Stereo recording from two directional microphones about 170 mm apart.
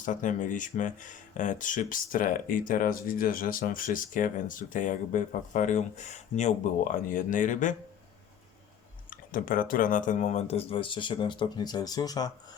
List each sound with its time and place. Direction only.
0.0 s speech: 50° left (ahead or behind)
9.0 s speech: 55° left (ahead or behind); by 12.3 s 20° left (ahead or behind)